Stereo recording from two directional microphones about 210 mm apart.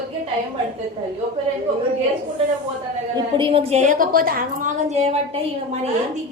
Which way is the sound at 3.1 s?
25° right (ahead or behind).